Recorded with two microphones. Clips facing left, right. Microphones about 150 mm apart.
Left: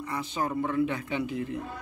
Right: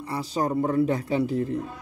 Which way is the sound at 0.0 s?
35° right (ahead or behind).